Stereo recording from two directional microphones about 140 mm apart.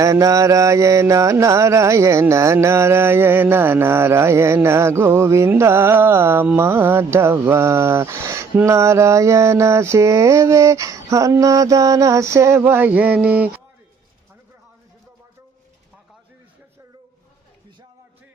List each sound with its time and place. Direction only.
0.0 s mantra: 25° right (ahead or behind)